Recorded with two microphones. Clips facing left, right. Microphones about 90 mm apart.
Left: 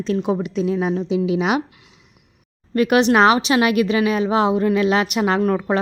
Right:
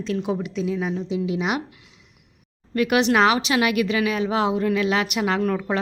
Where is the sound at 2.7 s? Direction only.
40° left (ahead or behind).